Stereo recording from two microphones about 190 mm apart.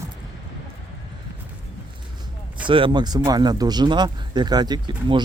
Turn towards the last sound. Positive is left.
turn(degrees=-25)  # may be behind; listen again after turning